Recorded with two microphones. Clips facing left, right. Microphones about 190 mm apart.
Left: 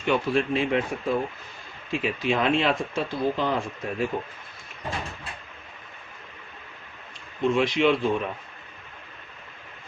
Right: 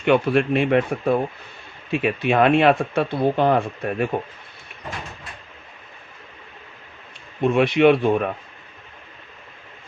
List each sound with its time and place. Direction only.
0.0 s speech: 65° right (ahead or behind)
7.4 s speech: 60° right (ahead or behind)